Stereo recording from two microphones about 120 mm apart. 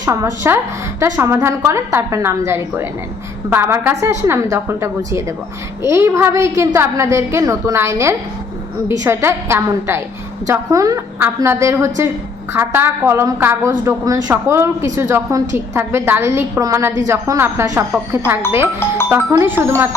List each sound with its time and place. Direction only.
0.0 s a woman's voice: 30° right (ahead or behind)